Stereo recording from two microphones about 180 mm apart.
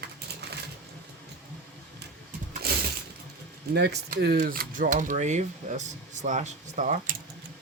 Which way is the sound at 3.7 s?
65° right (ahead or behind).